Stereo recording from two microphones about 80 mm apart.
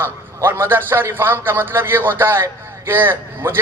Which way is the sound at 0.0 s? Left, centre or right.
Right.